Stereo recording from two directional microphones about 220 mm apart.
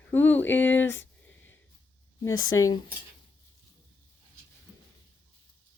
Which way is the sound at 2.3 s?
65° left (ahead or behind).